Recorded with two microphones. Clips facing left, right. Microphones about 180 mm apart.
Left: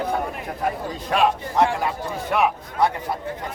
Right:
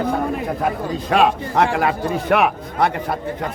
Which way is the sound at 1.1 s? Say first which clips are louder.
Right 3 dB; 80° right.